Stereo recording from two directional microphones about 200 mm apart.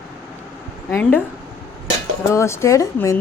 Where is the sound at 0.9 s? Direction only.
10° left (ahead or behind).